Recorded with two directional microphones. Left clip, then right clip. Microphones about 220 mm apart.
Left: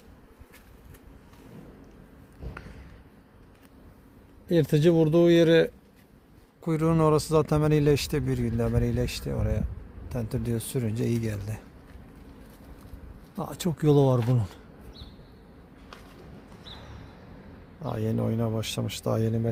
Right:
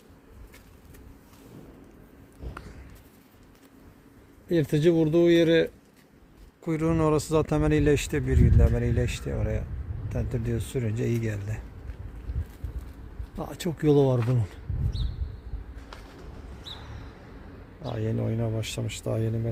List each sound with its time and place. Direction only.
4.4 s speech: 20° left (ahead or behind)
13.3 s speech: 10° left (ahead or behind)
17.8 s speech: 15° left (ahead or behind)